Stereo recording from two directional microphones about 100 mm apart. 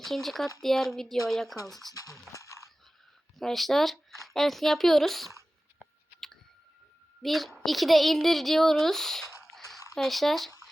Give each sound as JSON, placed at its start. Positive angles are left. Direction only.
{"t": 0.0, "sound": "a woman's voice", "side_deg": 0}
{"t": 2.3, "sound": "a sound", "side_deg": 30}
{"t": 3.3, "sound": "a woman's voice", "side_deg": 0}
{"t": 7.2, "sound": "a woman's voice", "side_deg": 0}
{"t": 9.5, "sound": "a sound", "side_deg": 0}
{"t": 9.9, "sound": "a woman's voice", "side_deg": 0}